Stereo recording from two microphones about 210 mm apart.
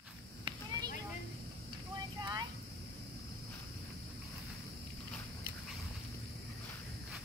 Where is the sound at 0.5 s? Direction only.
20° right (ahead or behind).